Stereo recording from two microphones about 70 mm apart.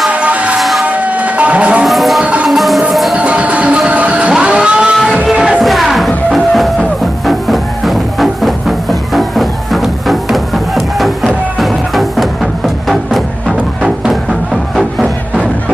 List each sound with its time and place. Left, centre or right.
0.1 s music: centre
0.6 s a sound: centre
0.8 s music: right
1.9 s music: centre
3.2 s music: centre
4.3 s a sound: centre
5.2 s music: centre
5.6 s music: centre